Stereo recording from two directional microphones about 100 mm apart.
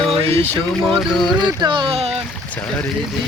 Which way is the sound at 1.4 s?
50° right (ahead or behind).